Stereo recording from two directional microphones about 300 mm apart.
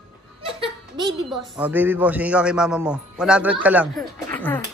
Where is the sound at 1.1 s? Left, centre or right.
Centre.